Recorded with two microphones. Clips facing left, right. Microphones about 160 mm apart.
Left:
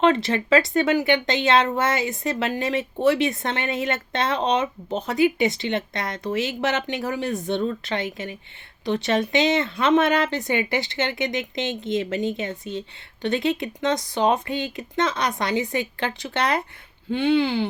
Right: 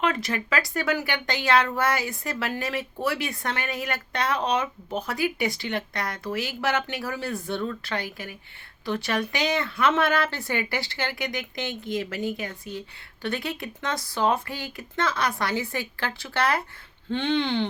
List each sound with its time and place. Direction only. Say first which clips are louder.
0.0 s speech: left 7 dB; 25° left (ahead or behind)
17.1 s speech: left 5 dB; 10° left (ahead or behind)